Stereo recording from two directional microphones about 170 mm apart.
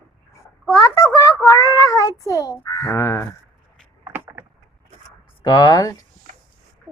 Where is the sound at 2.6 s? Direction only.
15° left (ahead or behind).